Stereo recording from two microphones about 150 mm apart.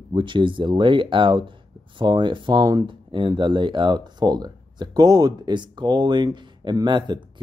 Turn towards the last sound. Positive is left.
turn(degrees=-30)  # may be behind; listen again after turning